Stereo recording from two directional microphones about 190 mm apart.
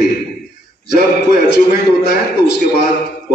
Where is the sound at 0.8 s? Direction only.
60° left (ahead or behind).